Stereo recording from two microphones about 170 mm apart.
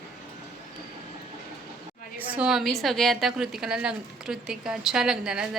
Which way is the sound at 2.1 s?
10° right (ahead or behind).